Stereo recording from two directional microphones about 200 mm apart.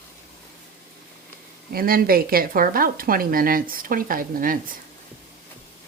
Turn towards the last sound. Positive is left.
turn(degrees=-45)  # may be behind; listen again after turning